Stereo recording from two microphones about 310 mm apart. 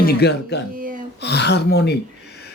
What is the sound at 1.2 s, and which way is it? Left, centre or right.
Speech, left.